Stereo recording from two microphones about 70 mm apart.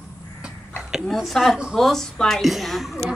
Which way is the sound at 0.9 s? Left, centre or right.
Centre.